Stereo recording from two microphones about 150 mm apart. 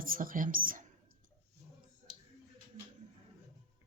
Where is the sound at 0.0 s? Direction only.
65° right (ahead or behind).